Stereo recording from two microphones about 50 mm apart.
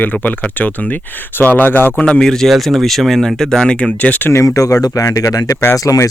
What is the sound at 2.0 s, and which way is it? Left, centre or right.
Speech, centre.